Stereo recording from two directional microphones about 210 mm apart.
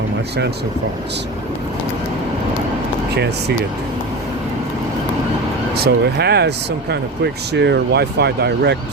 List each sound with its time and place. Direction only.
5.7 s speech: 50° right (ahead or behind)
7.5 s speech: 55° right (ahead or behind)